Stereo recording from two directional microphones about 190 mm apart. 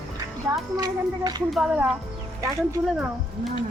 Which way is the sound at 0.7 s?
20° right (ahead or behind).